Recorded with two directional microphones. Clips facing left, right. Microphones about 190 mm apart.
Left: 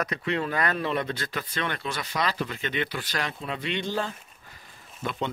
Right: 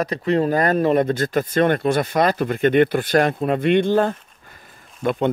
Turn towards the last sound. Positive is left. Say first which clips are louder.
# right 11 dB
turn(degrees=-55)  # may be behind; listen again after turning